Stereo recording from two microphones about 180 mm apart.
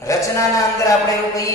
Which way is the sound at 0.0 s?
15° left (ahead or behind).